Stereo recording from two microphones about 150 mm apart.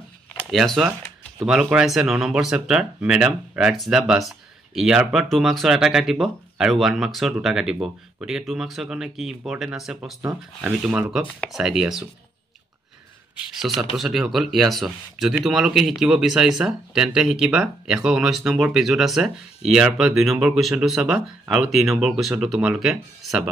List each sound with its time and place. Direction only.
0.5 s speech: centre (ahead or behind)
13.6 s speech: centre (ahead or behind)